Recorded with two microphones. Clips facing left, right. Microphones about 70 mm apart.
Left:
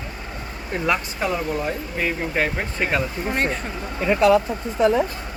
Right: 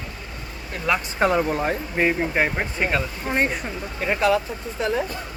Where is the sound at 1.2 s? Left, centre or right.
Right.